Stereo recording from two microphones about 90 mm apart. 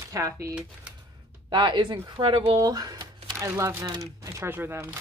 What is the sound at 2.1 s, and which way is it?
Speech, 70° right (ahead or behind).